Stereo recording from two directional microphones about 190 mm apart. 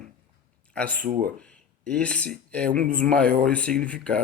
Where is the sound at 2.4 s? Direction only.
5° left (ahead or behind).